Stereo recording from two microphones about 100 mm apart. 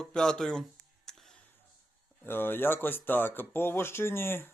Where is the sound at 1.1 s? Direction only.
5° left (ahead or behind).